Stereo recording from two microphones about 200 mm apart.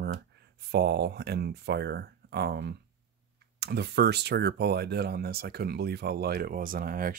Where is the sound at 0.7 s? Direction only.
55° right (ahead or behind).